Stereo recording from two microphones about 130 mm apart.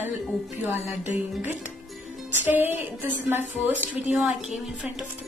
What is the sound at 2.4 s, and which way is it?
Speech, 15° right (ahead or behind).